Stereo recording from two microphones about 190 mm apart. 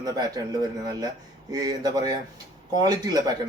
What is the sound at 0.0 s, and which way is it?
Speech, 20° right (ahead or behind).